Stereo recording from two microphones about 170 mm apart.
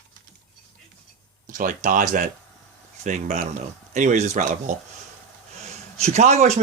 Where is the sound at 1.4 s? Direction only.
50° right (ahead or behind).